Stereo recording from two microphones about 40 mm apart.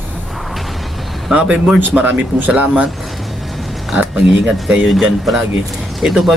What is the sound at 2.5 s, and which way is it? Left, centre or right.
Speech, right.